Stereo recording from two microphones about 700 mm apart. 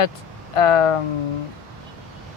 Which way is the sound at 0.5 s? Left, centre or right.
Left.